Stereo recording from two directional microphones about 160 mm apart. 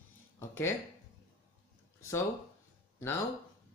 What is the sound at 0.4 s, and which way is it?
Speech, 15° left (ahead or behind).